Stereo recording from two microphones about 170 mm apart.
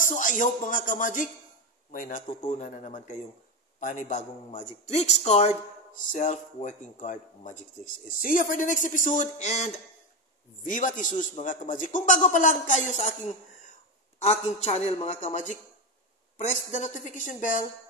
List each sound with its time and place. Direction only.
0.0 s a woman's voice: 50° left (ahead or behind)
14.2 s a woman's voice: 40° left (ahead or behind)